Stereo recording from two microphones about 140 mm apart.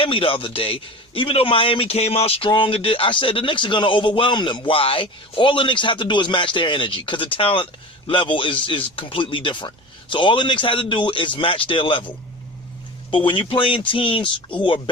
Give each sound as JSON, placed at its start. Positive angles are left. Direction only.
{"t": 0.0, "sound": "speech", "side_deg": 40}